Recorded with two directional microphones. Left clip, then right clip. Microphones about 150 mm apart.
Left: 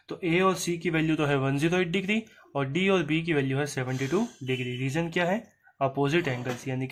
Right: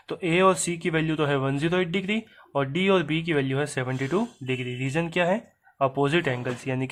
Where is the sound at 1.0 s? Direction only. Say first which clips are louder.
Right 1 dB; 15° right (ahead or behind).